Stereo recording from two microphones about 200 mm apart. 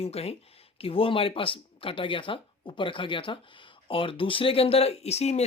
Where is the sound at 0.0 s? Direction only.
30° left (ahead or behind).